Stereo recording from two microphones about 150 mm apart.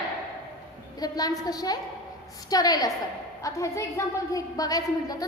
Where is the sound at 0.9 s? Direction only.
25° left (ahead or behind).